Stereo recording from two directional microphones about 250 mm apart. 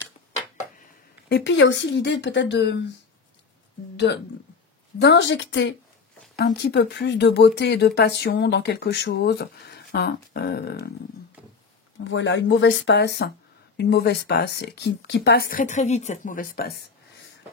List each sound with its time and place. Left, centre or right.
1.3 s speech: left
3.9 s a sound: left
4.9 s speech: left
12.0 s speech: left